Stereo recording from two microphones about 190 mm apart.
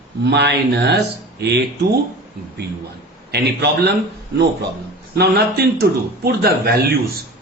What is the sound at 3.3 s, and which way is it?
A man's voice, 60° right (ahead or behind).